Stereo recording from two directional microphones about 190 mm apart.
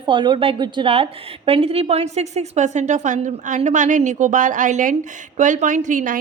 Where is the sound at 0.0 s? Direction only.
25° right (ahead or behind).